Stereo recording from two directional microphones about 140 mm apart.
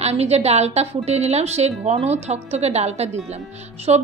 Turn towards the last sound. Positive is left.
turn(degrees=-50)  # may be behind; listen again after turning